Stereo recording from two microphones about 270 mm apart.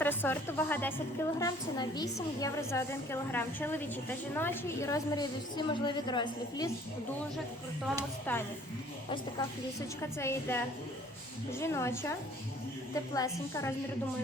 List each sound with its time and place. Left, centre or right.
0.0 s a woman's voice: centre
8.3 s a woman's voice: centre
10.0 s a woman's voice: centre